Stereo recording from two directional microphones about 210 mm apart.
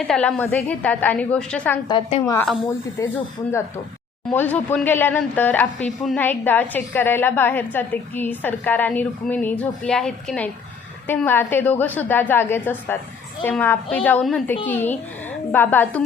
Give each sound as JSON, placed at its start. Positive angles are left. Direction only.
{"t": 0.1, "sound": "speech", "side_deg": 5}
{"t": 1.9, "sound": "a woman's voice", "side_deg": 30}
{"t": 2.2, "sound": "speech", "side_deg": 15}
{"t": 4.3, "sound": "speech", "side_deg": 10}